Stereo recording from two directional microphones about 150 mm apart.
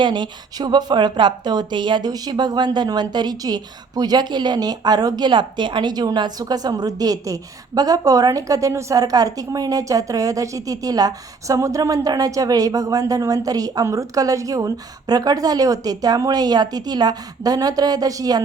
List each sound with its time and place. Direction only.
0.0 s a woman's voice: 30° right (ahead or behind)